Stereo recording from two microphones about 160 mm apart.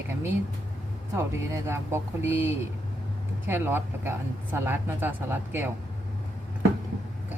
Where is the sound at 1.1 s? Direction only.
15° right (ahead or behind).